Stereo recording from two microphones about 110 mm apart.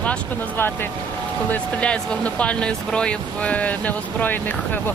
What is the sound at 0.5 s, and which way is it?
Speech, 20° left (ahead or behind).